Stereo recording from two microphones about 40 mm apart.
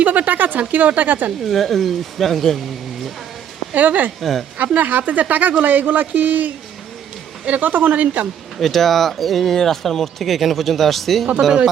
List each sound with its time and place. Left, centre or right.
0.0 s speech: right
1.5 s speech: centre
3.8 s speech: right
4.2 s speech: centre
4.5 s speech: right
8.0 s a woman's voice: right
8.5 s speech: centre